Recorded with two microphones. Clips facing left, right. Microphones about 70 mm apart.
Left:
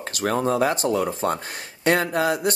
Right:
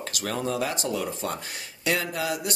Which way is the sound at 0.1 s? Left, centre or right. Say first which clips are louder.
Left 7 dB; left.